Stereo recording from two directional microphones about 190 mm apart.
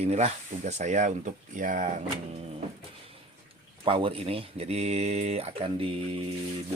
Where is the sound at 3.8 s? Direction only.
30° right (ahead or behind).